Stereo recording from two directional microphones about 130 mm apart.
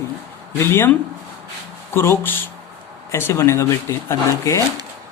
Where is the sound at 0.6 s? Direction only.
15° left (ahead or behind).